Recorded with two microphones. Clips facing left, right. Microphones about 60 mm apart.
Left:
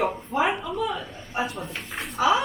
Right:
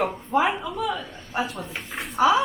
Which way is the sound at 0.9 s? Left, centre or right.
Left.